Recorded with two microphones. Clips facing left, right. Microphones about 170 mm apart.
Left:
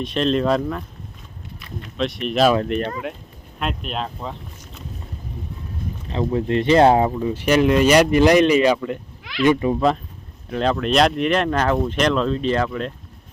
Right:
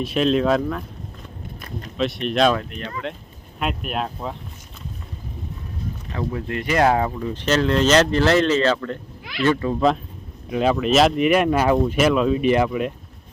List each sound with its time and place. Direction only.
0.0 s speech: 5° right (ahead or behind)
2.0 s speech: centre (ahead or behind)
3.6 s speech: 5° right (ahead or behind)
6.1 s speech: 25° left (ahead or behind)
10.5 s speech: 10° right (ahead or behind)